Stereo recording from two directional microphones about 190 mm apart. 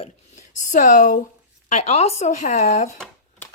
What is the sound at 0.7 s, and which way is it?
Speech, 40° left (ahead or behind).